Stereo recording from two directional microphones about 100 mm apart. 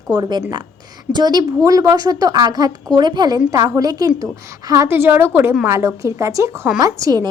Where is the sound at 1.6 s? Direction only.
35° right (ahead or behind).